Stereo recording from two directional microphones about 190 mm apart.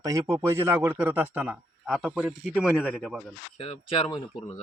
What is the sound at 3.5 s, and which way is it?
Speech, 30° left (ahead or behind).